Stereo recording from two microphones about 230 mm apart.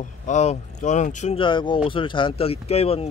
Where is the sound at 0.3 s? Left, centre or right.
Left.